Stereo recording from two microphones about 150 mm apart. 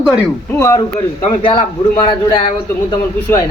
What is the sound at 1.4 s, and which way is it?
Speech, 35° left (ahead or behind).